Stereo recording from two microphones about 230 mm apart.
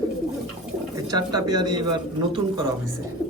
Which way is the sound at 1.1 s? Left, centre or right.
Centre.